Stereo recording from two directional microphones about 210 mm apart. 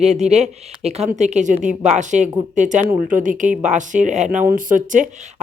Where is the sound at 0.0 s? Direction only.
30° right (ahead or behind).